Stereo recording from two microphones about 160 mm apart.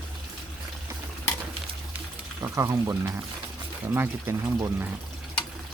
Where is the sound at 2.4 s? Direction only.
20° right (ahead or behind).